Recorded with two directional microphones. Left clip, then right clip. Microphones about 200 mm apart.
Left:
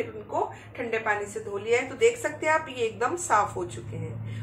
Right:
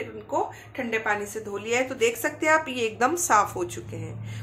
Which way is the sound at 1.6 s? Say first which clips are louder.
Left 1 dB; 55° right (ahead or behind).